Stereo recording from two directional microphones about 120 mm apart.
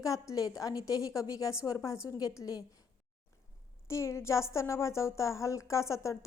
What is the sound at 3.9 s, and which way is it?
A woman's voice, 25° left (ahead or behind).